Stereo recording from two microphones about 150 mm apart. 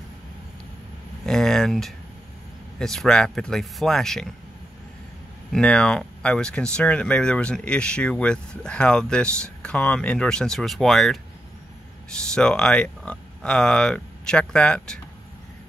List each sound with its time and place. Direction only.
1.2 s a sound: 5° left (ahead or behind)
2.8 s speech: 5° left (ahead or behind)
5.5 s speech: 5° left (ahead or behind)